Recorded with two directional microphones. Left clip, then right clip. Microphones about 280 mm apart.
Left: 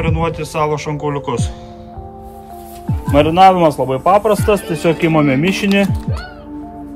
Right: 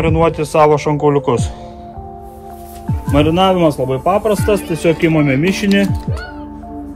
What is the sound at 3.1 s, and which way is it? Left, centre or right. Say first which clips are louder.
Speech: left 4 dB; left.